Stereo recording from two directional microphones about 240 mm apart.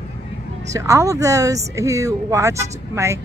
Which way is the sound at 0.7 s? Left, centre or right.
Centre.